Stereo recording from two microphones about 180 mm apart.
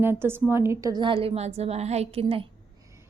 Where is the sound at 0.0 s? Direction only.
10° right (ahead or behind); by 2.5 s 35° right (ahead or behind).